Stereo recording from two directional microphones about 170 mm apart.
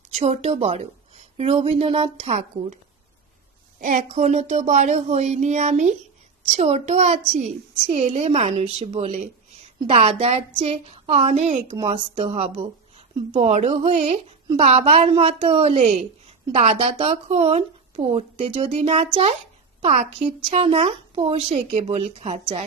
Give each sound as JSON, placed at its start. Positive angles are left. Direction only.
{"t": 0.2, "sound": "a woman's voice", "side_deg": -40}
{"t": 3.8, "sound": "a woman's voice", "side_deg": -50}